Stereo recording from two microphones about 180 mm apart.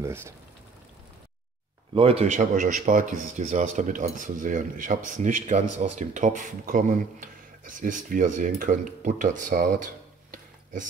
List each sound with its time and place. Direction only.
0.0 s speech: 15° right (ahead or behind)
2.0 s speech: 35° right (ahead or behind)